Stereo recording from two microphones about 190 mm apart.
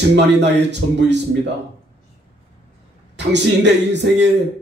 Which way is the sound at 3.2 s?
65° right (ahead or behind).